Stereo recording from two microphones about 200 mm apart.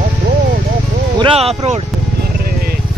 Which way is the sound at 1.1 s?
30° right (ahead or behind).